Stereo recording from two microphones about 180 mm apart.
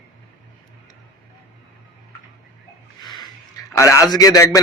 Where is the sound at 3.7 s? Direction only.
15° left (ahead or behind).